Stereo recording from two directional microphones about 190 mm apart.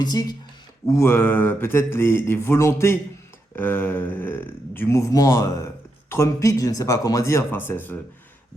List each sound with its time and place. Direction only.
0.0 s speech: 20° left (ahead or behind)